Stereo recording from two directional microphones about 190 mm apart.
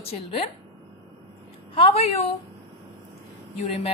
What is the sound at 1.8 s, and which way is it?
Speech, 30° left (ahead or behind).